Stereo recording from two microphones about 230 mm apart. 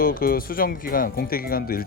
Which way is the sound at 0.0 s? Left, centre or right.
Left.